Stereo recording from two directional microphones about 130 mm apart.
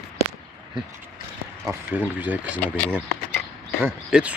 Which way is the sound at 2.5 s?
10° left (ahead or behind).